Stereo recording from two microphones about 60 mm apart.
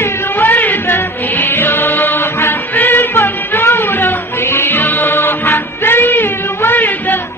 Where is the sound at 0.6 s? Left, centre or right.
Left.